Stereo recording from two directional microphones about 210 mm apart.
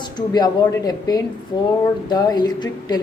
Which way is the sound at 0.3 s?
20° left (ahead or behind).